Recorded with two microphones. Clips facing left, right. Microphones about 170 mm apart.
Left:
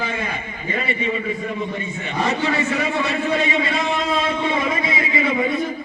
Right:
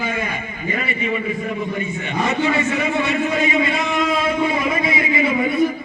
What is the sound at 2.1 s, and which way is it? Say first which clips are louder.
A man's voice: right 1 dB; 35° left (ahead or behind).